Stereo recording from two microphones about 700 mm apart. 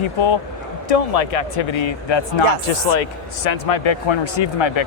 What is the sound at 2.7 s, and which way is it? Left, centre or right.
Speech, left.